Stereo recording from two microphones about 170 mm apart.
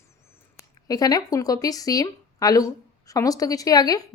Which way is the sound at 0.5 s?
20° left (ahead or behind).